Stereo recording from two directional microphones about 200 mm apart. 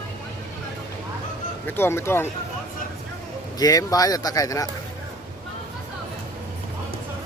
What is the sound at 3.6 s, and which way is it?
Speech, 20° left (ahead or behind).